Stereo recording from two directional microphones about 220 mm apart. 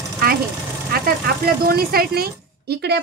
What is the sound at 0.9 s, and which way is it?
Speech, 45° right (ahead or behind).